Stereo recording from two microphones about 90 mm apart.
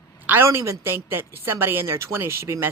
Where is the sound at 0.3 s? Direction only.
25° right (ahead or behind).